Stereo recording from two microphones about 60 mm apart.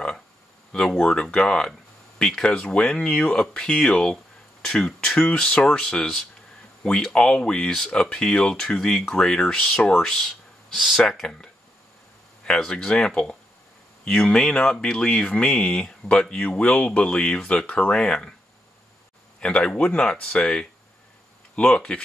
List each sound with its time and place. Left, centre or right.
0.7 s speech: centre
12.4 s speech: centre
19.4 s speech: centre